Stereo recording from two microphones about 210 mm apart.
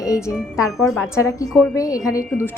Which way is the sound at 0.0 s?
15° left (ahead or behind).